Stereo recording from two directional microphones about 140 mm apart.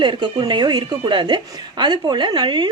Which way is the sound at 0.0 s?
35° right (ahead or behind).